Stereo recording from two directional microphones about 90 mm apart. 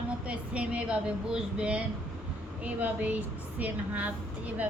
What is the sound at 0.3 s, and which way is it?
A woman's voice, 15° right (ahead or behind).